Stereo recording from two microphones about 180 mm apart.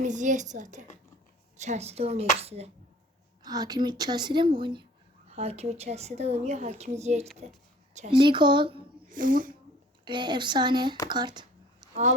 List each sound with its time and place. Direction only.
0.0 s a woman's voice: 45° right (ahead or behind)
3.4 s speech: 20° right (ahead or behind); by 7.3 s 40° right (ahead or behind)
8.1 s speech: 25° right (ahead or behind)
9.0 s speech: 45° right (ahead or behind)
10.0 s speech: 25° right (ahead or behind)
11.1 s a sound: 25° right (ahead or behind)